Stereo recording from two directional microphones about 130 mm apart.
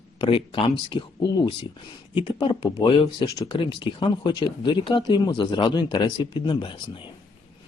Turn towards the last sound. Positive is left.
turn(degrees=40)  # may be behind; listen again after turning